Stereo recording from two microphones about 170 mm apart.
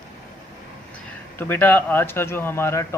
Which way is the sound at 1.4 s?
10° left (ahead or behind).